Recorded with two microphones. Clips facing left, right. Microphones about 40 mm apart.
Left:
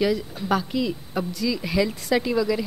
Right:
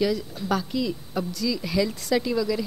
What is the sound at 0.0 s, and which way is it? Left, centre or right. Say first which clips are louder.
A woman's voice: left 2 dB; left.